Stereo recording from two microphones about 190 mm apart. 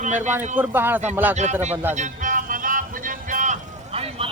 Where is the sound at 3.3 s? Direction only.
40° right (ahead or behind).